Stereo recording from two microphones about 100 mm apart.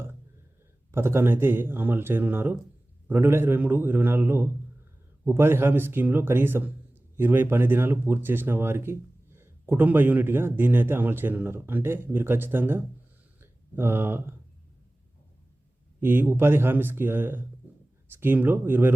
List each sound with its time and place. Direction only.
0.9 s speech: 25° right (ahead or behind)
16.0 s speech: 20° right (ahead or behind)